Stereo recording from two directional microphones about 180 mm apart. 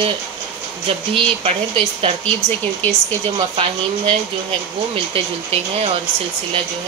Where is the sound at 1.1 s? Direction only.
30° right (ahead or behind).